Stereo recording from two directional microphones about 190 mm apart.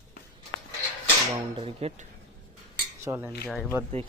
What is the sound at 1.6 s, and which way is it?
Speech, 30° right (ahead or behind).